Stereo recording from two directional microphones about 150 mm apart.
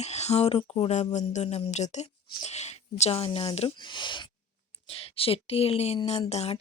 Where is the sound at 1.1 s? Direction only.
50° left (ahead or behind).